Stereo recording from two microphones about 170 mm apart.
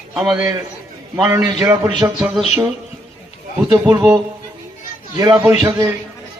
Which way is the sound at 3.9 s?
25° right (ahead or behind).